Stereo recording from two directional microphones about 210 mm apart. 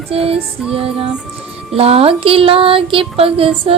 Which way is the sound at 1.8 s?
30° right (ahead or behind).